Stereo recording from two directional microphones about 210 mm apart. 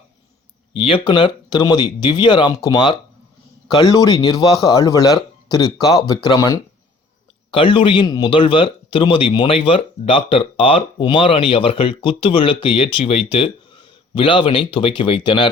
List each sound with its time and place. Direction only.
0.8 s a man's voice: 25° left (ahead or behind)